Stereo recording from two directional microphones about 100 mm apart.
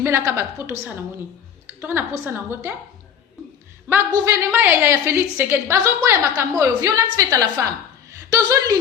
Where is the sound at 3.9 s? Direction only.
25° right (ahead or behind).